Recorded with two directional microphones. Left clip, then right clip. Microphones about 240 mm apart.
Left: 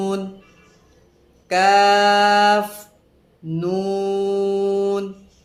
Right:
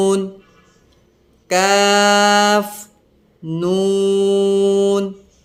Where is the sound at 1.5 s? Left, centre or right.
Centre.